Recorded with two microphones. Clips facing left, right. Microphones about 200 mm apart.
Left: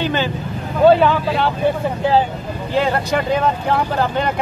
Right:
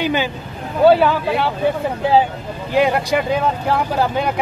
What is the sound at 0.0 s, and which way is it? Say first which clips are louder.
Speech: even; 10° right (ahead or behind).